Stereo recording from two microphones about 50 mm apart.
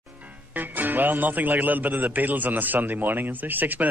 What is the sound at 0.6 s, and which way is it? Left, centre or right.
A man's voice, right.